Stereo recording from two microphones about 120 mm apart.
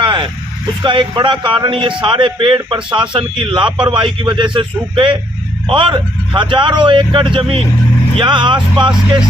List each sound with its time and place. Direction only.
0.0 s vehicle: 40° right (ahead or behind)
0.8 s a man's voice: 40° right (ahead or behind)